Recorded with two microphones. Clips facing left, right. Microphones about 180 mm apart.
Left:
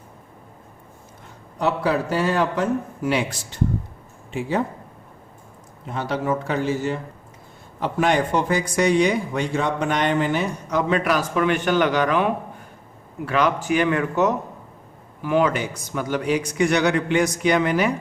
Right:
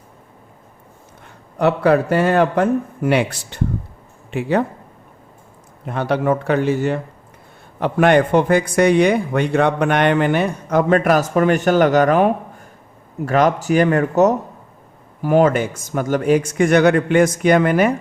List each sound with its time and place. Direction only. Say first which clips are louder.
1.5 s a man's voice: right 7 dB; 60° right (ahead or behind)
5.8 s a man's voice: right 6 dB; 60° right (ahead or behind)